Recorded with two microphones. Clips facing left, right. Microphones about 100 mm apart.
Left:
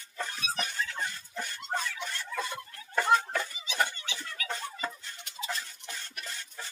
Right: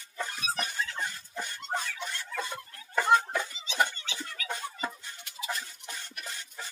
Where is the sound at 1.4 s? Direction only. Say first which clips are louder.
Even; 15° right (ahead or behind).